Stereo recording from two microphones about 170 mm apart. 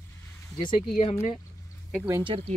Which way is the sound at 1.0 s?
40° left (ahead or behind).